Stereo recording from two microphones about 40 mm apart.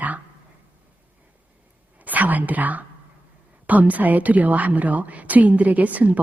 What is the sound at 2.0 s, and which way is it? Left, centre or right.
A woman's voice, right.